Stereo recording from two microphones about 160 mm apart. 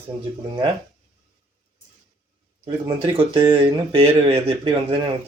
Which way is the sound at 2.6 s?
30° right (ahead or behind).